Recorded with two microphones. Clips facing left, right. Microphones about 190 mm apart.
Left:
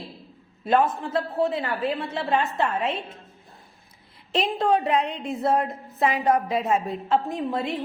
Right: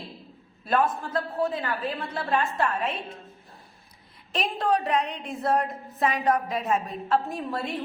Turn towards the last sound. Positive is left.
turn(degrees=20)  # may be behind; listen again after turning